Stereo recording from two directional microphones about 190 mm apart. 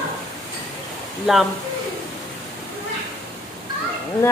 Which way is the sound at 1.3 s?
Centre (ahead or behind).